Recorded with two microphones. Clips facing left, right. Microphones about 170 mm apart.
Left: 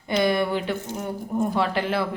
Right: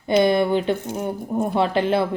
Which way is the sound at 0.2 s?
25° right (ahead or behind).